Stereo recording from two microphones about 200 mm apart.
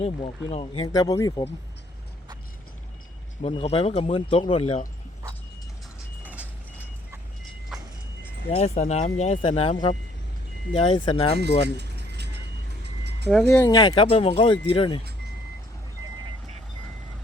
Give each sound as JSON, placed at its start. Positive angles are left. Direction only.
{"t": 0.0, "sound": "speech", "side_deg": 30}
{"t": 3.4, "sound": "speech", "side_deg": 30}
{"t": 6.2, "sound": "vehicle", "side_deg": -5}
{"t": 7.7, "sound": "vehicle", "side_deg": 0}
{"t": 8.5, "sound": "speech", "side_deg": 30}
{"t": 11.3, "sound": "keys jangling", "side_deg": -55}
{"t": 12.8, "sound": "vehicle", "side_deg": -55}
{"t": 13.7, "sound": "speech", "side_deg": 20}